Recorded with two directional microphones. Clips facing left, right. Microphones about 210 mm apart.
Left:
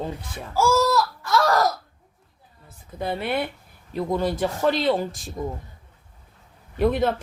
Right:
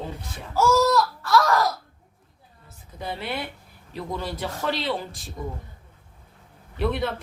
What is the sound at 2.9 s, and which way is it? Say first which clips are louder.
Speech: left 6 dB; 55° left (ahead or behind).